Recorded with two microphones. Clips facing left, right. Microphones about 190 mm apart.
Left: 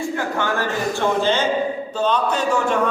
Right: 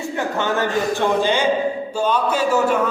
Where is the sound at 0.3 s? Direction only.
20° right (ahead or behind).